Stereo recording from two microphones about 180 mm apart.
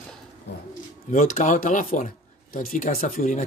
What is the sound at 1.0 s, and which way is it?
Speech, 45° left (ahead or behind).